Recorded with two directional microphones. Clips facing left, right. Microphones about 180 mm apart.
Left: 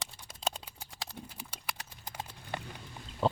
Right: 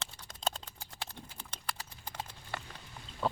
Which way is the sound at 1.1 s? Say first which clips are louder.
Left 3 dB; 10° left (ahead or behind).